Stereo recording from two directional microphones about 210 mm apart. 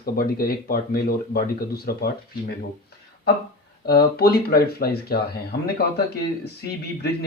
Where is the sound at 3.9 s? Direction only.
50° left (ahead or behind).